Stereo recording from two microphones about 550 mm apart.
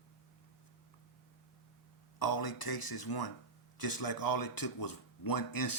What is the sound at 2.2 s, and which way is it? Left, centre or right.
A man's voice, left.